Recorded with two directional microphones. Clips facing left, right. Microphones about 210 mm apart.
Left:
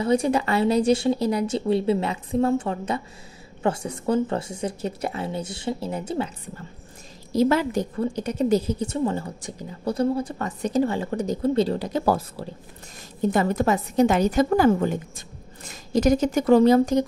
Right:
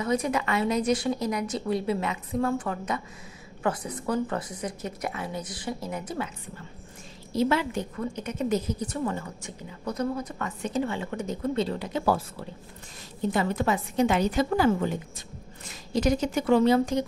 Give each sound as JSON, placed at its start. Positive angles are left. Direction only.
{"t": 0.0, "sound": "speech", "side_deg": 30}
{"t": 7.3, "sound": "a woman's voice", "side_deg": 40}